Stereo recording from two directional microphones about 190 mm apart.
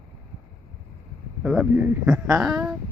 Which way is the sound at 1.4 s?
5° right (ahead or behind).